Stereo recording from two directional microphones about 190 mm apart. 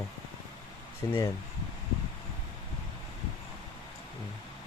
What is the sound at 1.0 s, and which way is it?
Speech, 20° left (ahead or behind).